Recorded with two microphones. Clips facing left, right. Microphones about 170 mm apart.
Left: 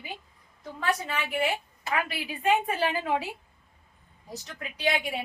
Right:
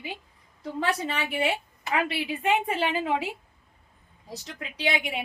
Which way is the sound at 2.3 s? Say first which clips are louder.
Left 3 dB; 25° right (ahead or behind).